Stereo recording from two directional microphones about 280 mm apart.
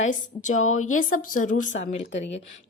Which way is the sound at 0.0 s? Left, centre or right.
Left.